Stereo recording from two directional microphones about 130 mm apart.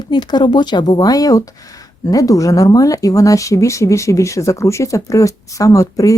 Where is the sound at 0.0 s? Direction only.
35° left (ahead or behind).